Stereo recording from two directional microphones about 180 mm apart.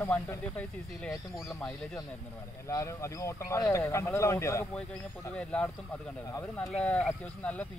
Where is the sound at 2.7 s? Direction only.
15° left (ahead or behind).